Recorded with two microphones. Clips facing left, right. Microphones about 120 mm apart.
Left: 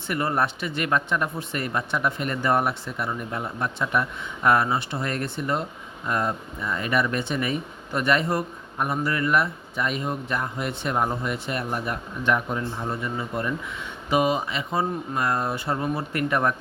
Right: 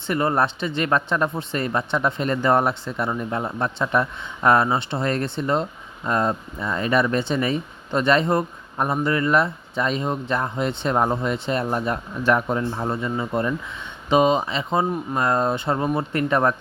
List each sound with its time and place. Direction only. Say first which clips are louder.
0.1 s speech: right 4 dB; 25° right (ahead or behind)
12.3 s speech: right 4 dB; 40° right (ahead or behind)
12.9 s speech: right 4 dB; 25° right (ahead or behind)